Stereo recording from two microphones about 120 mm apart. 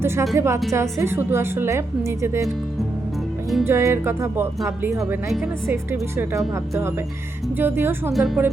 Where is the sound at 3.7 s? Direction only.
20° right (ahead or behind).